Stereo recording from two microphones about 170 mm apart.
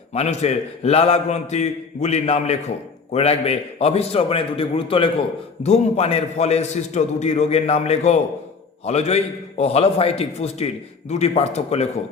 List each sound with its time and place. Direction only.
0.1 s a man's voice: 40° left (ahead or behind)